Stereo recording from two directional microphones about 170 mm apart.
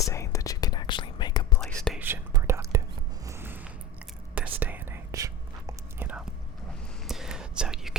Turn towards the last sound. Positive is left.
turn(degrees=0)  # may be behind; listen again after turning